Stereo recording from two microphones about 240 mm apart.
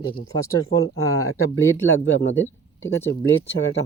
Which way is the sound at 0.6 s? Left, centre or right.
Left.